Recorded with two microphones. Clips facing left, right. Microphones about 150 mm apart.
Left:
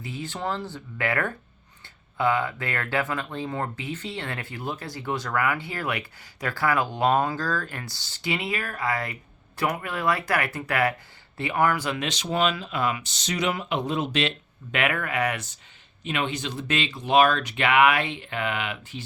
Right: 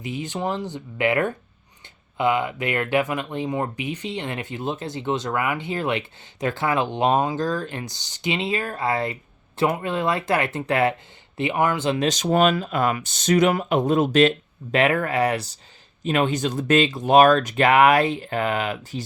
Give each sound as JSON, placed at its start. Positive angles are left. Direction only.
{"t": 0.0, "sound": "speech", "side_deg": -20}
{"t": 11.9, "sound": "speech", "side_deg": -40}
{"t": 16.0, "sound": "speech", "side_deg": -45}